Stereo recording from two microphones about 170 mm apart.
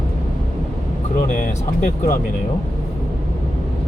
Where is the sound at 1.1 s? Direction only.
50° left (ahead or behind).